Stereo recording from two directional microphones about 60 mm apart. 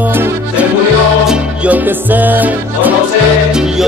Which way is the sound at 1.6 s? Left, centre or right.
Right.